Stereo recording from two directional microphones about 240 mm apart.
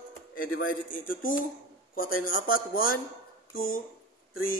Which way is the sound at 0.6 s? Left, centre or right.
Left.